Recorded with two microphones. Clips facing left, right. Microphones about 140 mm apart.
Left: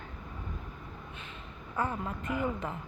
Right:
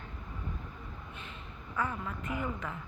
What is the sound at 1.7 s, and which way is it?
Speech, 35° left (ahead or behind).